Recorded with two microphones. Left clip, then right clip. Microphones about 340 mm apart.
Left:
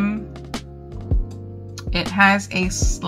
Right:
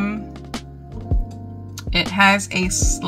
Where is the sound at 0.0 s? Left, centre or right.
Centre.